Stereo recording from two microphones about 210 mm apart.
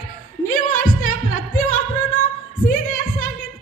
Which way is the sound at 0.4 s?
40° left (ahead or behind).